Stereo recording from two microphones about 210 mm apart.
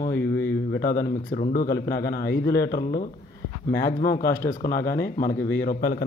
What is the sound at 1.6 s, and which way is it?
Speech, 15° left (ahead or behind).